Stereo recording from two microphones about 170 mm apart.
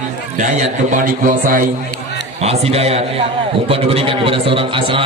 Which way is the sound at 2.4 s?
40° right (ahead or behind).